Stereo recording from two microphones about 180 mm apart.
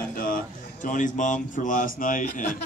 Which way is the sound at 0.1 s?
50° left (ahead or behind).